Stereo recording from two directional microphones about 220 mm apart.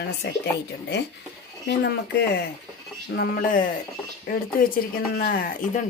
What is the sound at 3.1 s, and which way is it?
Speech, 45° left (ahead or behind).